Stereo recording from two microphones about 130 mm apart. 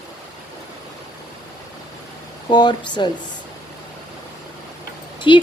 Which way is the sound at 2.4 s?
35° left (ahead or behind).